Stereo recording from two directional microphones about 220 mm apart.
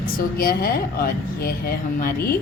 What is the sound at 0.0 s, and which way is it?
A woman's voice, 40° left (ahead or behind).